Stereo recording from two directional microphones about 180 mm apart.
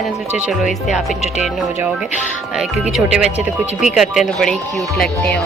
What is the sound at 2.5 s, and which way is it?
Speech, 5° right (ahead or behind).